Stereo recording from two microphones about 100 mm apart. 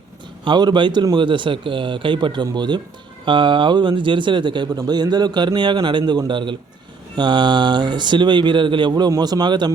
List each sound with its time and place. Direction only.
0.4 s speech: 50° right (ahead or behind)